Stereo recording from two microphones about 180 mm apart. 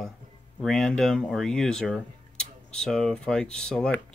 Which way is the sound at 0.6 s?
5° left (ahead or behind).